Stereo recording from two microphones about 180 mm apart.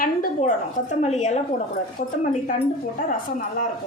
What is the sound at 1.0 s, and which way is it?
Speech, 40° left (ahead or behind).